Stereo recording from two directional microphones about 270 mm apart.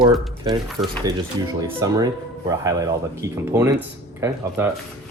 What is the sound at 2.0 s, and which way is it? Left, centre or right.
Speech, centre.